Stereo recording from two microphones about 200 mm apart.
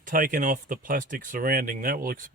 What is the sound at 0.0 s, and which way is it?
Speech, 45° right (ahead or behind).